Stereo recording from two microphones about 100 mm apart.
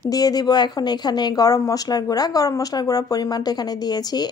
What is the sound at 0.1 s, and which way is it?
A woman's voice, 40° left (ahead or behind).